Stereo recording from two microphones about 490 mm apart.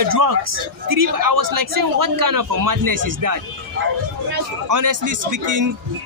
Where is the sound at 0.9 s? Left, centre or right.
Right.